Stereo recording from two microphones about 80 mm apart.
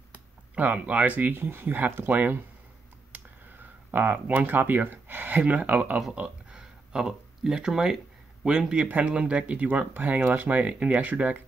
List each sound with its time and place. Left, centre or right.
0.6 s speech: centre
3.1 s a sound: right
3.9 s speech: centre